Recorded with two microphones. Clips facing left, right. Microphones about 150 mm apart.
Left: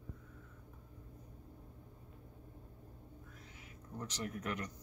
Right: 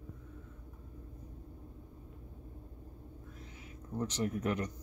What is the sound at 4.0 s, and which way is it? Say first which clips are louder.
Speech: right 8 dB; 25° right (ahead or behind).